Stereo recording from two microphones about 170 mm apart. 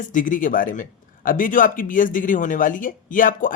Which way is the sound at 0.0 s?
50° left (ahead or behind).